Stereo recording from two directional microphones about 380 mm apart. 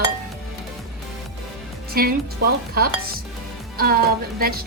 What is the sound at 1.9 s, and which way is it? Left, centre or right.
A woman's voice, right.